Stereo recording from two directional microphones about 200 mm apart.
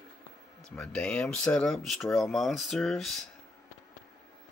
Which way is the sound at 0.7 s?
5° left (ahead or behind).